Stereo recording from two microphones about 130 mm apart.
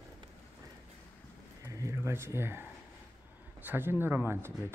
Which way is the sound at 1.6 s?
25° right (ahead or behind).